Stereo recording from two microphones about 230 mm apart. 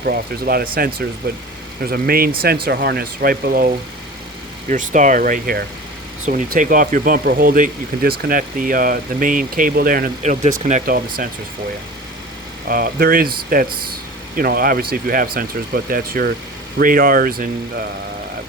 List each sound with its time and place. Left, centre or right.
0.0 s speech: right
4.7 s speech: right
12.6 s speech: right